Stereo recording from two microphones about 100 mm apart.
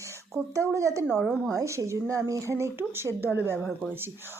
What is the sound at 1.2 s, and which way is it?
Speech, 5° left (ahead or behind).